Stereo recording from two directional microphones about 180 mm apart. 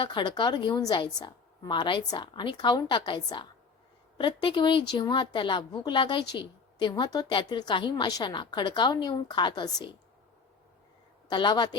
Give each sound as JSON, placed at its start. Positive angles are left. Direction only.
{"t": 0.0, "sound": "a woman's voice", "side_deg": 25}
{"t": 11.3, "sound": "a woman's voice", "side_deg": 25}